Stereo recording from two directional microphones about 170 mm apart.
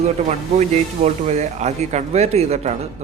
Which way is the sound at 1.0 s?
40° right (ahead or behind).